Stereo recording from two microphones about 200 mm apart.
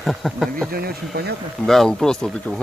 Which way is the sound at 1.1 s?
50° right (ahead or behind).